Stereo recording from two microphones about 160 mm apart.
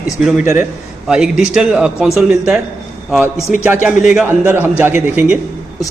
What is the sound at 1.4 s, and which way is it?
A man's voice, 5° right (ahead or behind).